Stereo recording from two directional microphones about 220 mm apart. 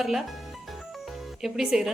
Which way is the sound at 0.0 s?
Centre (ahead or behind).